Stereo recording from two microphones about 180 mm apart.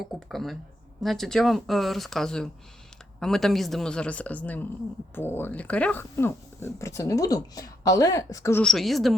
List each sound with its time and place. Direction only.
0.0 s a woman's voice: centre (ahead or behind); by 8.6 s 15° left (ahead or behind)
8.6 s a woman's voice: centre (ahead or behind)